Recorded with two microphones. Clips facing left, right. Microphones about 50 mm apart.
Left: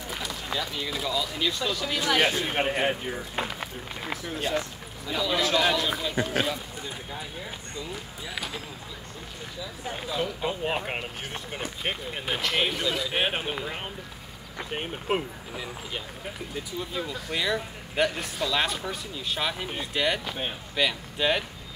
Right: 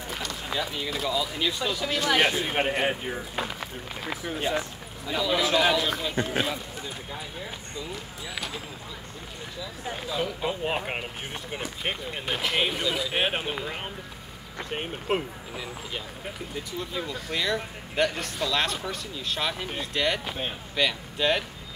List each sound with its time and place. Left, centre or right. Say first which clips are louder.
0.1 s a sound: even; centre
0.5 s speech: right 1 dB; centre
4.2 s speech: right 1 dB; centre
5.0 s speech: right 1 dB; centre
9.8 s speech: even; centre
12.4 s speech: even; centre